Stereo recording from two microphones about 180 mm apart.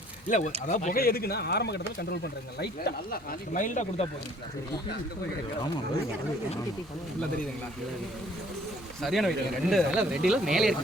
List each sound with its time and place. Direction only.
0.3 s speech: 45° left (ahead or behind)
9.0 s speech: centre (ahead or behind)